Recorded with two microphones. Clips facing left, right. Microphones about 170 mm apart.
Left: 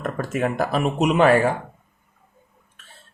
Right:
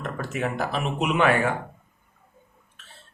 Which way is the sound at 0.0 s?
50° left (ahead or behind).